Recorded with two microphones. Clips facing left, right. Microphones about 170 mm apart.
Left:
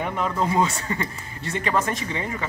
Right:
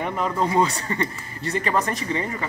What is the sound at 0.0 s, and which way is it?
Speech, centre (ahead or behind).